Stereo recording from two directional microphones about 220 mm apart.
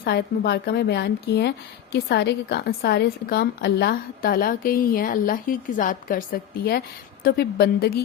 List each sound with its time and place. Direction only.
0.0 s speech: 45° left (ahead or behind)